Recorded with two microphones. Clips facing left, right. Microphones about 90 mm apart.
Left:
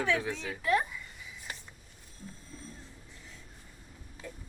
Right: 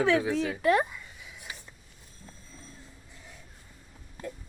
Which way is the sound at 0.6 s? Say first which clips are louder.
Right 4 dB; 85° right.